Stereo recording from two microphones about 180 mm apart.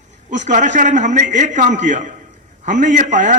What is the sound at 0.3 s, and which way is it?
A man's voice, 40° right (ahead or behind).